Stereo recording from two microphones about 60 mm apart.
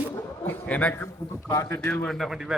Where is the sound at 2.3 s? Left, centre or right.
Centre.